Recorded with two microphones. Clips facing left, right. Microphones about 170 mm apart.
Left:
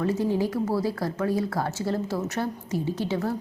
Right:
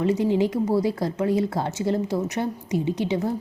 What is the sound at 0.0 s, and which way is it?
A woman's voice, 20° right (ahead or behind).